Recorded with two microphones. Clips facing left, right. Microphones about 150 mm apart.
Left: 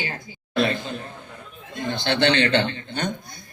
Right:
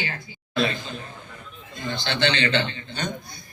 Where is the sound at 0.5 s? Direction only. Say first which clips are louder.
Left 2 dB; 55° left (ahead or behind).